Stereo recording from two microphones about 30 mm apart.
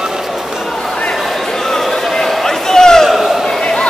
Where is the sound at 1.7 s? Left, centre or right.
Centre.